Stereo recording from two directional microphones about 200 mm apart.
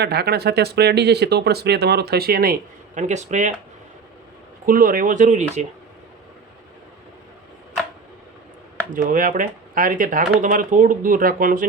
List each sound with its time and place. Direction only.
0.0 s speech: 55° right (ahead or behind); by 3.5 s 35° right (ahead or behind)
4.6 s speech: 45° right (ahead or behind)
8.9 s speech: 40° right (ahead or behind)